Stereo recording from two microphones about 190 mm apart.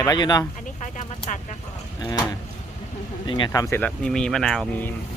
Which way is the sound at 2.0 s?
20° left (ahead or behind).